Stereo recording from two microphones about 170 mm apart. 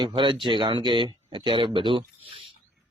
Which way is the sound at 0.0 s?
25° right (ahead or behind).